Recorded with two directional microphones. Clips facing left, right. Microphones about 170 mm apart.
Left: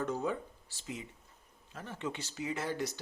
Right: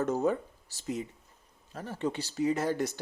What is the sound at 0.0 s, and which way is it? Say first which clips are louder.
A man's voice: right 6 dB; 45° right (ahead or behind).